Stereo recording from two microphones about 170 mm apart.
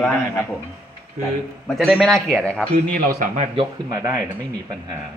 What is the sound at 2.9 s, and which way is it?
Speech, 55° right (ahead or behind).